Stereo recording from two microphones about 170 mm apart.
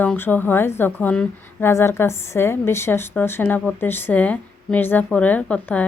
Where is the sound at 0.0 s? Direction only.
10° left (ahead or behind).